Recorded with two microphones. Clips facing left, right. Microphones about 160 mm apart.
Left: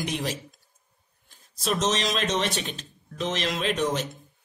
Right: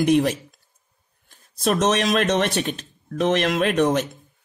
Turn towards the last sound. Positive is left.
turn(degrees=-60)  # may be behind; listen again after turning